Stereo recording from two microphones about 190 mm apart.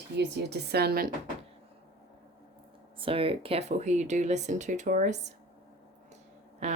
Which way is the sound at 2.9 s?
30° right (ahead or behind).